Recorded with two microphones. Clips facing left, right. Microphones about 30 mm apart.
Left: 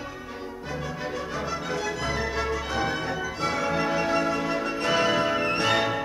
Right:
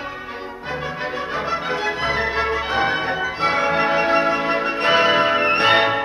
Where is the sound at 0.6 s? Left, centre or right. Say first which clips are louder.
Right 7 dB; right.